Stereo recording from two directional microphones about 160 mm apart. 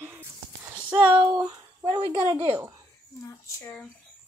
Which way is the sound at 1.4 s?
25° right (ahead or behind).